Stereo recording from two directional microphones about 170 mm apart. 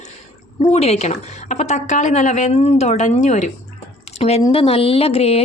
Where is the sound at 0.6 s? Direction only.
35° left (ahead or behind).